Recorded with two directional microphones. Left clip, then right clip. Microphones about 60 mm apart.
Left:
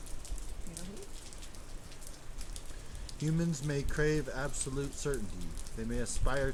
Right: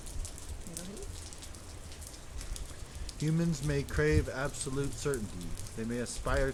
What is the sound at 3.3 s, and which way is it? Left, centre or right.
Speech, left.